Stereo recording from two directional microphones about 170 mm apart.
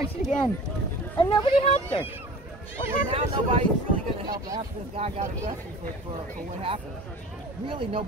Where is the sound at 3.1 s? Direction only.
35° right (ahead or behind).